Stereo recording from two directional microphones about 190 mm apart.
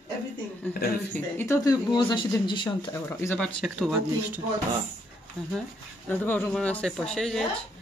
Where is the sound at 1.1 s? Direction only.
15° left (ahead or behind).